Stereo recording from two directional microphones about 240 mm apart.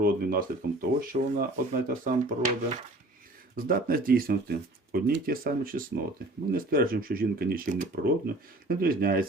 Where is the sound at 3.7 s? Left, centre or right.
Right.